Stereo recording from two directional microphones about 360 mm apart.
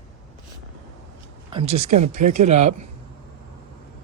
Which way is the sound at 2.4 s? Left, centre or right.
Centre.